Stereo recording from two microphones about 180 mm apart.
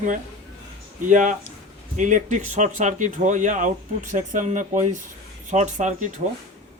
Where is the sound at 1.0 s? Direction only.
45° right (ahead or behind).